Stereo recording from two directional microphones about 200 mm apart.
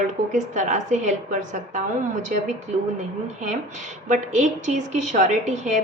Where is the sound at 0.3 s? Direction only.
35° right (ahead or behind).